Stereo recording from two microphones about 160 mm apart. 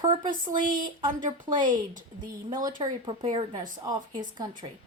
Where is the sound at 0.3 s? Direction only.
55° right (ahead or behind).